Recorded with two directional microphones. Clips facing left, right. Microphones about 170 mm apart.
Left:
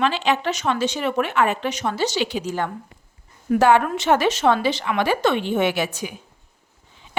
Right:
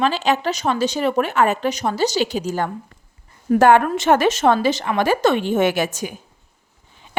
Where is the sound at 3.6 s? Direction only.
50° right (ahead or behind).